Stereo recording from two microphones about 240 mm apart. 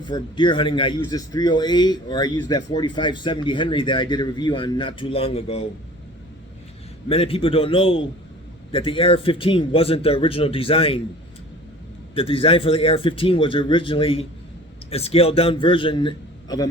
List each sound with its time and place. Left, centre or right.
0.0 s a man's voice: centre
7.1 s speech: left
12.1 s speech: left